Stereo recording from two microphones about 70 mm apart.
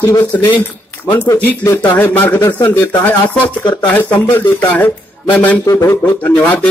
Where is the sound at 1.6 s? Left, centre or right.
Left.